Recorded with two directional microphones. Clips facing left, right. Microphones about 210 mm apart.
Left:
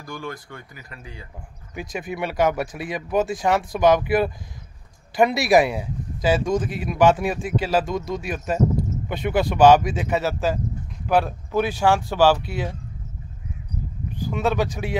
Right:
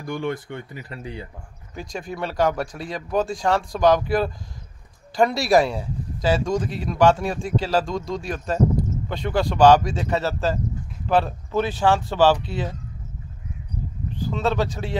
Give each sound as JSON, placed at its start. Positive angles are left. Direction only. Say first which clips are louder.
{"t": 0.0, "sound": "speech", "louder": "right 6 dB", "side_deg": -25}
{"t": 2.0, "sound": "speech", "louder": "left 1 dB", "side_deg": 15}
{"t": 2.5, "sound": "speech", "louder": "left 1 dB", "side_deg": 5}
{"t": 2.9, "sound": "speech", "louder": "left 1 dB", "side_deg": 15}
{"t": 5.3, "sound": "speech", "louder": "left 1 dB", "side_deg": 20}
{"t": 7.9, "sound": "speech", "louder": "left 1 dB", "side_deg": 5}
{"t": 8.7, "sound": "a sound", "louder": "even", "side_deg": 20}
{"t": 9.8, "sound": "speech", "louder": "left 1 dB", "side_deg": 15}
{"t": 14.2, "sound": "speech", "louder": "left 1 dB", "side_deg": 15}